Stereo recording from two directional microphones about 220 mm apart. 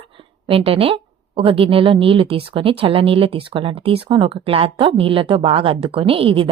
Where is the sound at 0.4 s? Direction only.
25° right (ahead or behind).